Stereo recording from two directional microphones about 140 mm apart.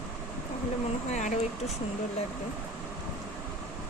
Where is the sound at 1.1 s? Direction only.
55° left (ahead or behind).